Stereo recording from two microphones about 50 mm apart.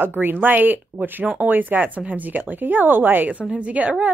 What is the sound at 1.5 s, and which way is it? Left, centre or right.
Speech, right.